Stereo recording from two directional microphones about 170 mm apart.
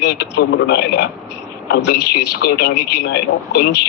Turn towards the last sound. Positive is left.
turn(degrees=75)  # may be behind; listen again after turning